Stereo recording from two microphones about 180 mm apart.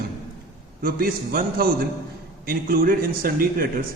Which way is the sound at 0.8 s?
55° right (ahead or behind).